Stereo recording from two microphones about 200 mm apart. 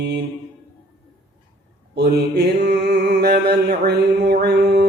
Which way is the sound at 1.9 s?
55° right (ahead or behind).